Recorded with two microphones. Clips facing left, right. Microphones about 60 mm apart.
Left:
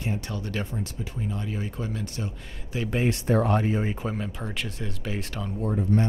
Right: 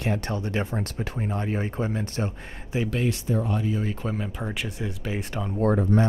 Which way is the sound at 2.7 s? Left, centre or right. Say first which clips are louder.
Right 3 dB; right.